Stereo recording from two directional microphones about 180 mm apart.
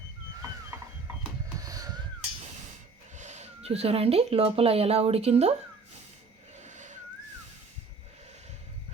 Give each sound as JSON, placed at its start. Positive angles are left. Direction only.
{"t": 1.5, "sound": "a sound", "side_deg": -20}
{"t": 3.2, "sound": "speech", "side_deg": -40}
{"t": 6.6, "sound": "whistling", "side_deg": -40}